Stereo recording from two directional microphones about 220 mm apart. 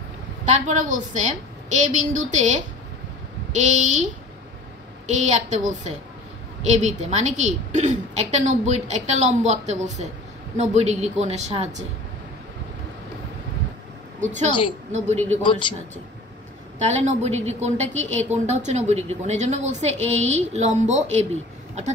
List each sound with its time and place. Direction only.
0.5 s a woman's voice: 35° right (ahead or behind)
14.2 s a woman's voice: 35° right (ahead or behind)
16.7 s a woman's voice: 30° right (ahead or behind)